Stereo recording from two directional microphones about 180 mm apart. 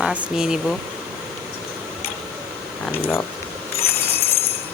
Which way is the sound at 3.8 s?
60° left (ahead or behind).